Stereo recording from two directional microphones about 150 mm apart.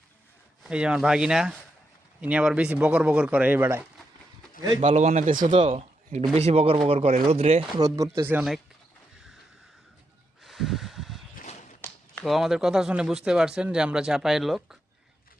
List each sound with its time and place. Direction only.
0.6 s speech: 5° right (ahead or behind)
4.8 s speech: 50° right (ahead or behind)
5.5 s speech: 40° right (ahead or behind)
7.8 s speech: 25° right (ahead or behind)
8.4 s speech: centre (ahead or behind)
10.4 s a sound: centre (ahead or behind)
12.2 s speech: centre (ahead or behind)